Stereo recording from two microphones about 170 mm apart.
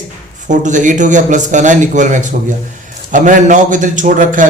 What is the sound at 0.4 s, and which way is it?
A man's voice, 45° right (ahead or behind).